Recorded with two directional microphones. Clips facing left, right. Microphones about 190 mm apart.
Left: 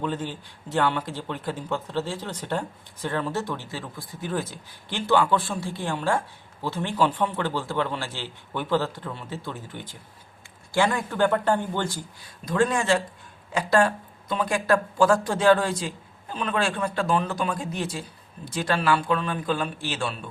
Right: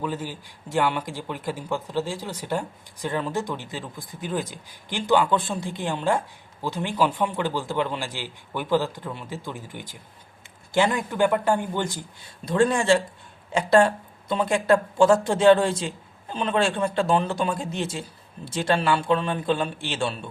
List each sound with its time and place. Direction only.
0.0 s speech: 10° right (ahead or behind)
12.5 s speech: 30° right (ahead or behind)